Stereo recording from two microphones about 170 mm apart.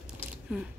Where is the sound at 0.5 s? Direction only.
5° right (ahead or behind).